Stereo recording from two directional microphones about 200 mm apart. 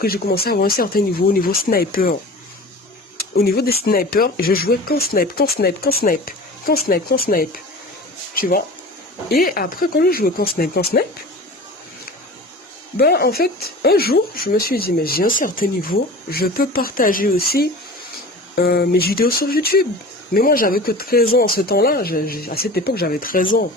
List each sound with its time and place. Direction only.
0.0 s speech: 50° left (ahead or behind)
3.3 s speech: 50° left (ahead or behind)
13.0 s speech: 50° left (ahead or behind)